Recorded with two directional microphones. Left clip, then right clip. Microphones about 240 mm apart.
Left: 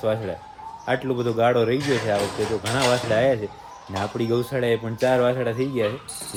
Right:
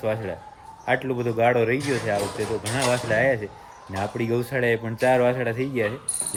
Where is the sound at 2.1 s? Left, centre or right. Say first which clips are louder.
Left 2 dB; left.